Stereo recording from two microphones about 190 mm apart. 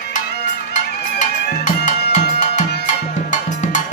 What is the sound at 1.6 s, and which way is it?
Music, 40° left (ahead or behind).